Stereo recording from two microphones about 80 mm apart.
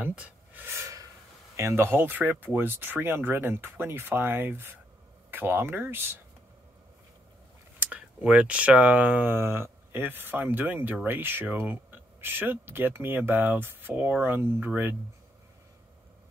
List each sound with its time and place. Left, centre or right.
0.1 s a sound: centre
0.7 s gasp: right
1.6 s speech: right
7.8 s speech: centre